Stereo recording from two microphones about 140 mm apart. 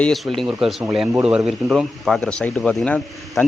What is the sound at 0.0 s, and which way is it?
Speech, centre (ahead or behind).